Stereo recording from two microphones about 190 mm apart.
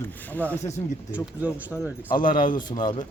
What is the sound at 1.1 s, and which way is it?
Speech, 10° right (ahead or behind).